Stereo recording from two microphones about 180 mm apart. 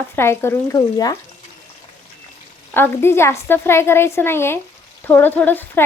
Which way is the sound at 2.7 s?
10° left (ahead or behind).